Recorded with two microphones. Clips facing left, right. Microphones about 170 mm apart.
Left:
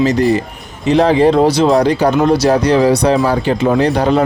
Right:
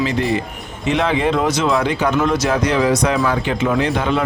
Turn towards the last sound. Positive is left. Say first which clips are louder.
# left 6 dB
turn(degrees=40)  # may be behind; listen again after turning